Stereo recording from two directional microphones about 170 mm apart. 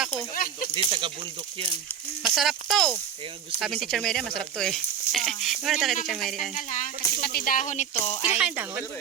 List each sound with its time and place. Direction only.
0.3 s a sound: 55° left (ahead or behind)
0.7 s speech: 30° right (ahead or behind)
2.3 s speech: centre (ahead or behind)
6.5 s speech: 50° left (ahead or behind)
8.4 s speech: 5° right (ahead or behind)